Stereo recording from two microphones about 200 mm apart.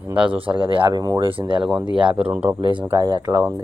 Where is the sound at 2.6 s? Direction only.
25° right (ahead or behind).